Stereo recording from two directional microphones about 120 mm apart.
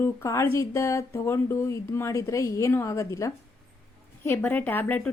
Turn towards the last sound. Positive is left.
turn(degrees=15)  # may be behind; listen again after turning